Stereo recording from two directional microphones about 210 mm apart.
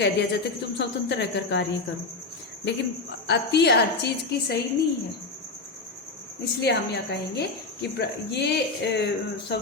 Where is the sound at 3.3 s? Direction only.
55° left (ahead or behind).